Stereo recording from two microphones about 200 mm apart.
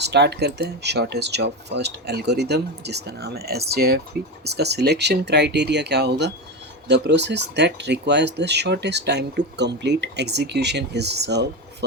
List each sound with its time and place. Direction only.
0.0 s speech: 55° right (ahead or behind)